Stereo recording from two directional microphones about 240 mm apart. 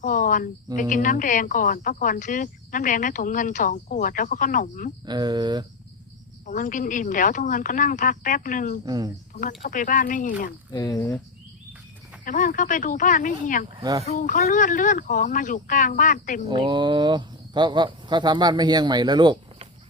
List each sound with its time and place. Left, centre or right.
0.0 s cricket: left
0.8 s speech: left
5.0 s speech: centre
6.4 s speech: left
10.7 s speech: centre
12.2 s speech: left
13.7 s speech: centre
14.1 s speech: left
16.5 s speech: centre